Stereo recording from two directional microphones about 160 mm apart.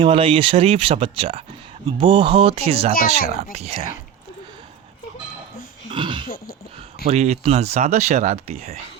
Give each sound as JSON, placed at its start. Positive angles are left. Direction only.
{"t": 0.0, "sound": "speech", "side_deg": -35}
{"t": 5.9, "sound": "throat clearing", "side_deg": -30}
{"t": 7.1, "sound": "speech", "side_deg": -40}